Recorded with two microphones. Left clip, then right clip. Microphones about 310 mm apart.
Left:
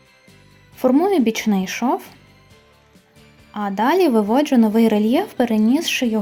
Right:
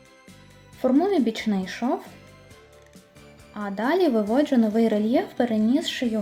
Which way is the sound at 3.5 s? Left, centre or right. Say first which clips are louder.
Left 7 dB; left.